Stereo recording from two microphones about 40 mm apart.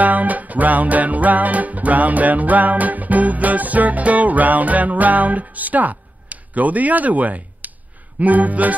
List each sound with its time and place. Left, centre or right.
0.0 s music: right